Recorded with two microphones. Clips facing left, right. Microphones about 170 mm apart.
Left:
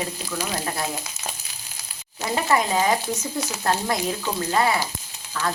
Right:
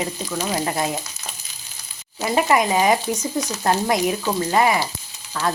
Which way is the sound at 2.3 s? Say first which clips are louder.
Right 3 dB; 15° right (ahead or behind).